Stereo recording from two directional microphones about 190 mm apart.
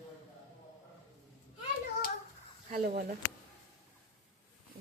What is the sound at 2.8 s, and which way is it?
Speech, 50° right (ahead or behind).